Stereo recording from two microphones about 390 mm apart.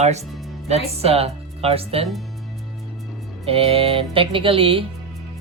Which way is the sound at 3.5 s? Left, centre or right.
Centre.